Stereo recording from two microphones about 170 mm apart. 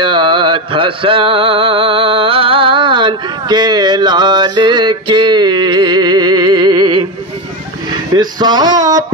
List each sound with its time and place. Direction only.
0.0 s music: 30° right (ahead or behind)
7.9 s speech: 25° right (ahead or behind)